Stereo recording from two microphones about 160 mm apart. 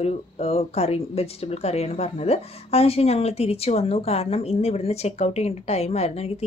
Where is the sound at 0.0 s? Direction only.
40° left (ahead or behind).